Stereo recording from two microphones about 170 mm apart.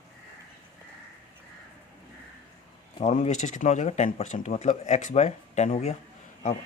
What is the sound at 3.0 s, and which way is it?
Speech, 40° left (ahead or behind).